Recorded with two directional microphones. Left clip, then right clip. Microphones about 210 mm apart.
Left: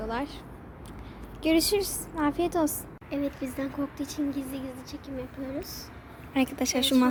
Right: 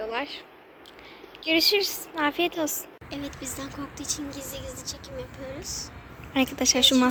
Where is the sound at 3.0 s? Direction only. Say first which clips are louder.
Left 5 dB; 45° left (ahead or behind).